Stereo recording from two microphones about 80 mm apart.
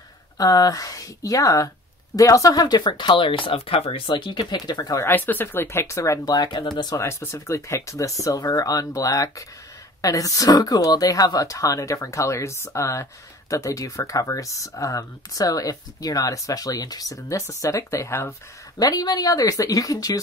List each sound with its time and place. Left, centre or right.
0.4 s speech: left
2.6 s speech: left
4.0 s speech: left
5.0 s speech: left
6.2 s speech: left
7.0 s speech: left
18.8 s speech: left